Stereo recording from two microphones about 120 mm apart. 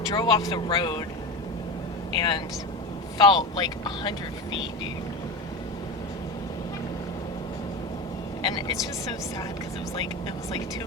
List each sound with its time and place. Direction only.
0.1 s speech: 35° left (ahead or behind)
2.1 s speech: 40° left (ahead or behind)
8.4 s speech: 40° left (ahead or behind)